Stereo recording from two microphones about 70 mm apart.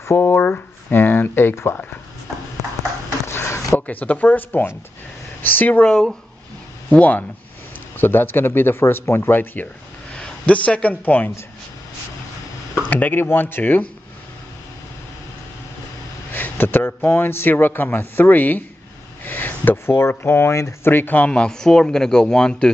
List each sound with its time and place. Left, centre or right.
0.0 s speech: left
0.4 s speech: left
3.3 s a sound: left
3.8 s a man's voice: left
5.9 s speech: centre
6.9 s a man's voice: left
8.0 s speech: left
10.1 s speech: centre
12.9 s a man's voice: left
16.3 s a man's voice: left
20.8 s speech: left; by 22.7 s centre